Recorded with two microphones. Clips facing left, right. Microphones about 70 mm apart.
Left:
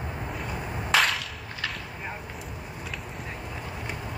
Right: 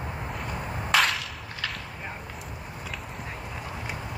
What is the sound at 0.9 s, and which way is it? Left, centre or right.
Whip, centre.